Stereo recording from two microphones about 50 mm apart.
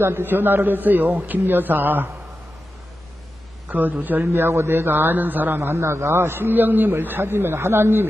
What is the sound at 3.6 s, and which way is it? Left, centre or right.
Speech, right.